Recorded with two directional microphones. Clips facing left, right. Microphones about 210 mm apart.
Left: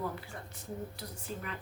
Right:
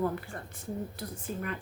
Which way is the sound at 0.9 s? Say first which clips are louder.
Right 5 dB; 55° right (ahead or behind).